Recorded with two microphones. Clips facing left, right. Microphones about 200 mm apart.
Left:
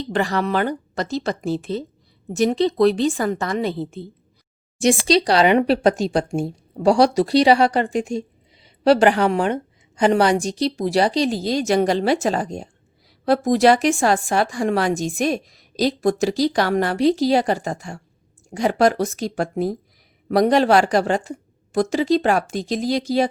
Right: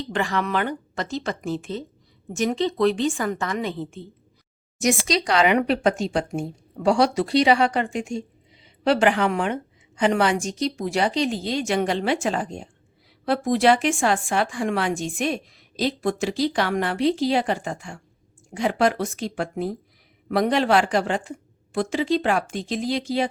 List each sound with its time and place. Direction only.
0.0 s a woman's voice: 35° left (ahead or behind)